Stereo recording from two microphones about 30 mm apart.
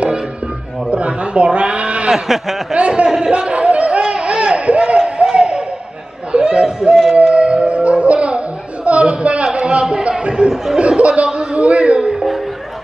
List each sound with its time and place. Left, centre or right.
0.8 s bleat: right
2.1 s speech: centre
2.7 s speech: right
3.3 s a sound: right
6.3 s chatter: right
7.2 s music: right
8.8 s a sound: right
10.8 s chuckle: right